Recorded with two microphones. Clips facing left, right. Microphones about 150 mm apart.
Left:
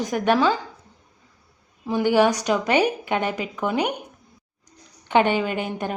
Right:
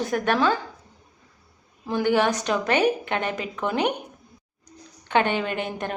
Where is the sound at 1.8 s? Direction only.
5° left (ahead or behind).